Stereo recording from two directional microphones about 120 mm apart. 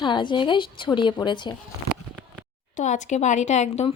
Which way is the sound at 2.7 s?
85° left.